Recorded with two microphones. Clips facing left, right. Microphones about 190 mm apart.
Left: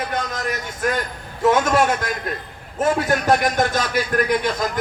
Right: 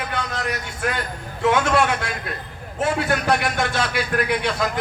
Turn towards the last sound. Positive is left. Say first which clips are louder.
# left 2 dB
turn(degrees=40)  # may be behind; listen again after turning